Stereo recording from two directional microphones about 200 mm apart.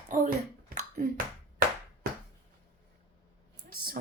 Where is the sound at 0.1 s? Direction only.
40° right (ahead or behind).